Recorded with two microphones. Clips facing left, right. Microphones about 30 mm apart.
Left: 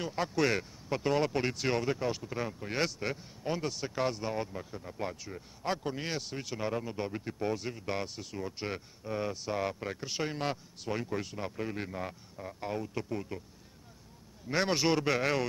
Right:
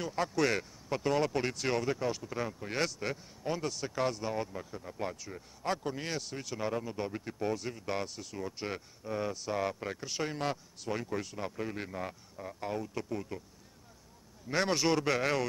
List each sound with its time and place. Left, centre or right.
0.0 s speech: centre
14.5 s speech: centre